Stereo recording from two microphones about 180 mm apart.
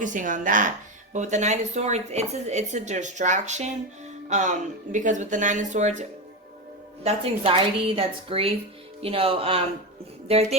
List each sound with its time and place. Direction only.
0.0 s a woman's voice: 45° right (ahead or behind)